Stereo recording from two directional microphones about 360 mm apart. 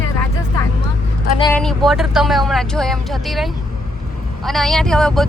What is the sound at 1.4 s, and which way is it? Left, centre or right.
Speech, centre.